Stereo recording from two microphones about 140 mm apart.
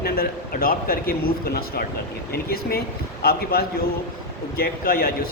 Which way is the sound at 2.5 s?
90° left.